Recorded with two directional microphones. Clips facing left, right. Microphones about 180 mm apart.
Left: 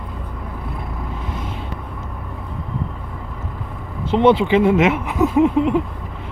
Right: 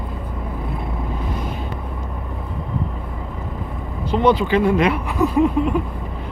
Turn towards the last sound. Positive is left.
turn(degrees=20)  # may be behind; listen again after turning